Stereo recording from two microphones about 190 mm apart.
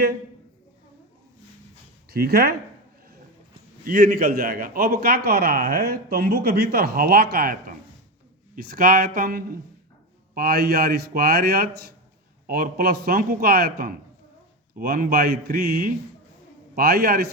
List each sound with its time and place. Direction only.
2.0 s a man's voice: 55° right (ahead or behind)
3.8 s a man's voice: 50° right (ahead or behind)